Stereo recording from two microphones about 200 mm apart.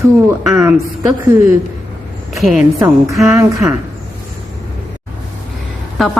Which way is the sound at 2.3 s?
Centre (ahead or behind).